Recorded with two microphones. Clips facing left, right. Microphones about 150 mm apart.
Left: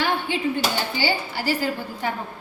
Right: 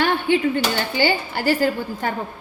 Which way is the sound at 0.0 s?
55° right (ahead or behind).